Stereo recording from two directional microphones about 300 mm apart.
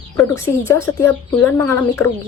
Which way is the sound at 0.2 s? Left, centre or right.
Centre.